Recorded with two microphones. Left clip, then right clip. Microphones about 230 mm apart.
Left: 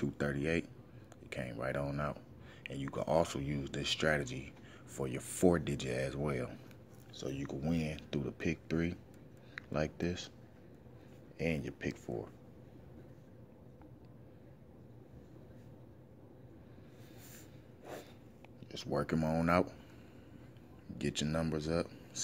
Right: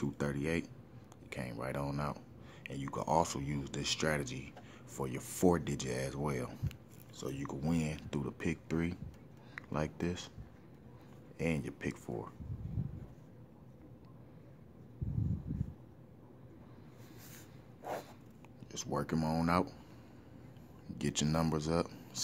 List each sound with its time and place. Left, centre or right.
0.0 s speech: centre
11.3 s speech: centre
18.7 s speech: centre
21.0 s speech: centre